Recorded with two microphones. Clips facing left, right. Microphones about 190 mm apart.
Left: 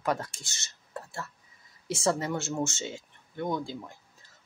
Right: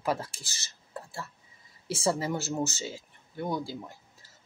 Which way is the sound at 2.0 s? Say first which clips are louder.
Even; 5° right (ahead or behind).